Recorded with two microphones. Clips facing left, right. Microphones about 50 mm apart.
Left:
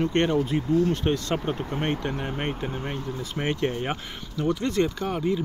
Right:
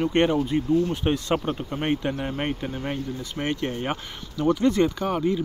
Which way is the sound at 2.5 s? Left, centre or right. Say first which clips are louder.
Right 1 dB; centre.